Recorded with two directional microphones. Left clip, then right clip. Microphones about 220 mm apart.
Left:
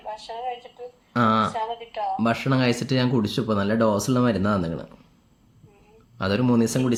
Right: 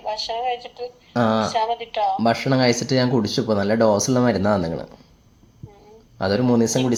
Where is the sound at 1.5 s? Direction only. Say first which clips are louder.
Right 7 dB; 35° right (ahead or behind).